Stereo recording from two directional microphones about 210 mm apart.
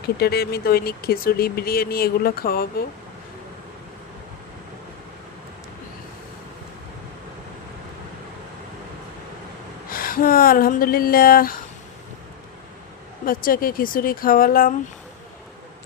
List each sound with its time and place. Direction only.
0.2 s speech: 50° left (ahead or behind)
9.9 s speech: 40° left (ahead or behind)
13.2 s speech: 45° left (ahead or behind)